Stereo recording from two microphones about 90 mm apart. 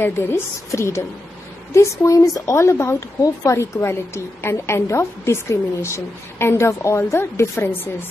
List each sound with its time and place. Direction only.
0.0 s speech: 30° left (ahead or behind)